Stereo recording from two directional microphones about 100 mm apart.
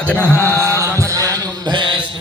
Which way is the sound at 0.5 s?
30° right (ahead or behind).